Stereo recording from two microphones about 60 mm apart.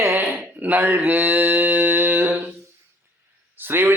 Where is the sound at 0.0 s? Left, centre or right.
Right.